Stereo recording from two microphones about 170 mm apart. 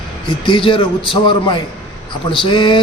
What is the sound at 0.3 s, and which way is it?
A man's voice, 30° left (ahead or behind).